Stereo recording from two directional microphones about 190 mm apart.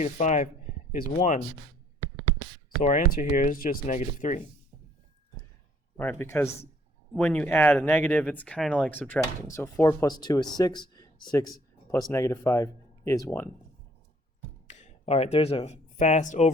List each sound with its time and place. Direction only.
0.0 s speech: 40° left (ahead or behind)
2.8 s speech: 45° left (ahead or behind)
6.0 s speech: 10° left (ahead or behind)
14.7 s speech: 35° left (ahead or behind)